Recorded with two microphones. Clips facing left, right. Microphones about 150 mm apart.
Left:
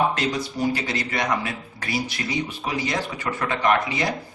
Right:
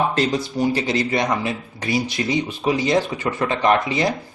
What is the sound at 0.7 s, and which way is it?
Speech, 25° right (ahead or behind).